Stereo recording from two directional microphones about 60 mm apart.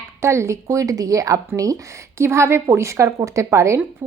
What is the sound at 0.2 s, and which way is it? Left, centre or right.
A woman's voice, right.